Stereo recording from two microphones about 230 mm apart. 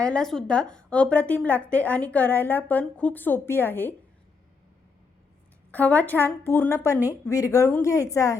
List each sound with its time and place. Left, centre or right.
0.0 s a woman's voice: centre
5.7 s a woman's voice: centre